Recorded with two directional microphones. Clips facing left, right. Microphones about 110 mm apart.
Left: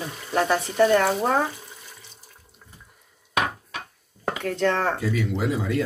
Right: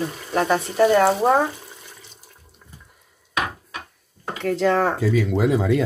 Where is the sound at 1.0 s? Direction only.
20° right (ahead or behind).